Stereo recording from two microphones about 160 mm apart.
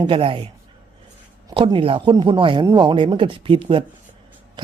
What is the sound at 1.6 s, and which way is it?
A man's voice, 30° right (ahead or behind).